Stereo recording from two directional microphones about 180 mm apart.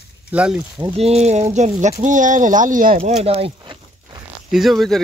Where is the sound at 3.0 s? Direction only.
35° right (ahead or behind).